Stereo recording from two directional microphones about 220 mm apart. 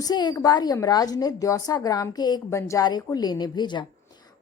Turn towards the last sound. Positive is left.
turn(degrees=20)  # may be behind; listen again after turning